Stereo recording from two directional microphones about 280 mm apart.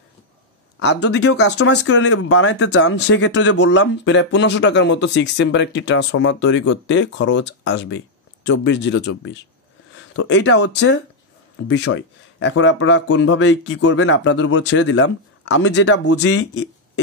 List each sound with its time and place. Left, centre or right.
0.7 s speech: left